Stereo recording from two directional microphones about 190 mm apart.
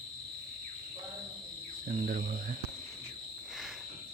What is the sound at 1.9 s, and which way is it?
Speech, 40° right (ahead or behind).